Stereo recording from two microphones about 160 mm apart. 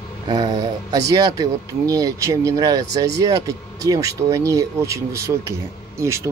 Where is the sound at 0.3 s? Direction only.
25° right (ahead or behind).